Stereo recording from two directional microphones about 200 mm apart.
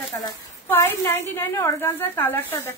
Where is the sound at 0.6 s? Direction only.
10° left (ahead or behind).